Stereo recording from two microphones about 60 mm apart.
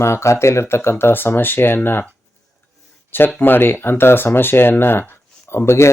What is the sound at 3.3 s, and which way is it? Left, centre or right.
Speech, left.